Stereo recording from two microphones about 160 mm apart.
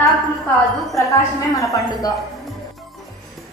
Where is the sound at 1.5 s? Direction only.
20° left (ahead or behind).